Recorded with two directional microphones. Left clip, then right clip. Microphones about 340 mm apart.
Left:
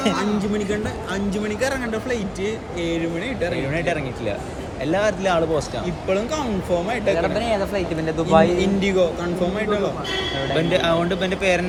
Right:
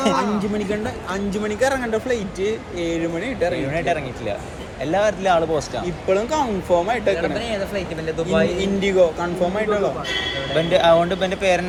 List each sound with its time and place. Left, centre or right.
0.0 s speech: centre
1.3 s speech: centre
4.9 s speech: centre
6.1 s speech: centre
7.3 s speech: left
8.5 s speech: centre
10.7 s speech: centre